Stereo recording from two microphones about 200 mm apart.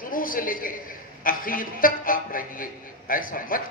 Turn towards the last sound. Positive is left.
turn(degrees=45)  # may be behind; listen again after turning